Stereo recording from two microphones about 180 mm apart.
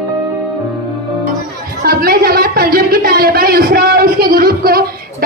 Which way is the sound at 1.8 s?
55° right (ahead or behind).